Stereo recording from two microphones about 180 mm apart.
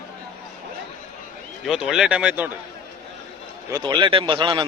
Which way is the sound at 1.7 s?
Centre (ahead or behind).